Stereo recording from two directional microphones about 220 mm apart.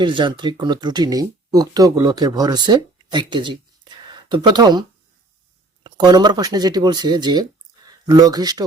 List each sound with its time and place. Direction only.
0.0 s speech: 20° right (ahead or behind)